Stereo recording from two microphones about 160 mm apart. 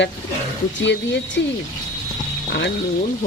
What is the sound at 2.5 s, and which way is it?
Speech, 90° left.